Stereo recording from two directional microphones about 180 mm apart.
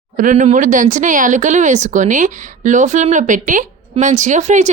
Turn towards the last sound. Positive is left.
turn(degrees=-40)  # may be behind; listen again after turning